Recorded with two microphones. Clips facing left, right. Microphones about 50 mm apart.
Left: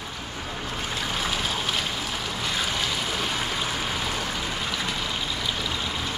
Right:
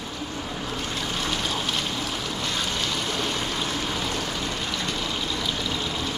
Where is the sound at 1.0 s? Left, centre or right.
Centre.